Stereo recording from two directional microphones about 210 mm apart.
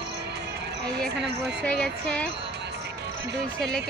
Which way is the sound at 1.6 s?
5° left (ahead or behind).